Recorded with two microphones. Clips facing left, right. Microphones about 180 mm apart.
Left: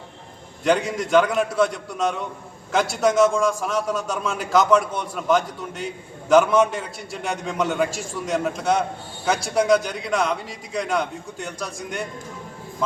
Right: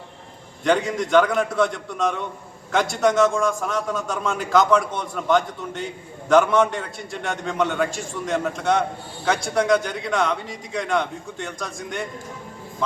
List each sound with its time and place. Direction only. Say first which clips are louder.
0.6 s a man's voice: even; centre (ahead or behind)